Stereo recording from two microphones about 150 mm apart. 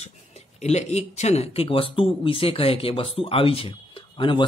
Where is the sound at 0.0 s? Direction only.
45° left (ahead or behind).